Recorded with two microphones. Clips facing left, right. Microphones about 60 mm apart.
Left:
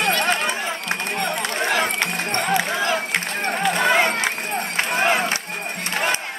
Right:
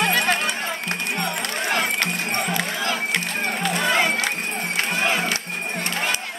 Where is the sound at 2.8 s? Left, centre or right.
Left.